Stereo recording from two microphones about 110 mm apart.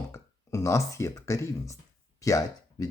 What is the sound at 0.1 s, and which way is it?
Speech, 30° left (ahead or behind).